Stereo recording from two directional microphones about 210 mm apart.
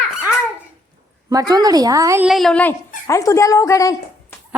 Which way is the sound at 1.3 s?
20° right (ahead or behind).